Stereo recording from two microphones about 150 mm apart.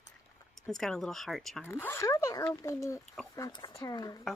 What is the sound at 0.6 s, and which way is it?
Speech, 5° left (ahead or behind).